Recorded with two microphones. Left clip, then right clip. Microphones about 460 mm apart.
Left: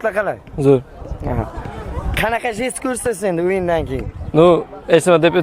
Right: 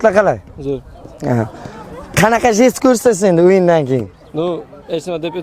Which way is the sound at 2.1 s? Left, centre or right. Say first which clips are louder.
Right 7 dB; right.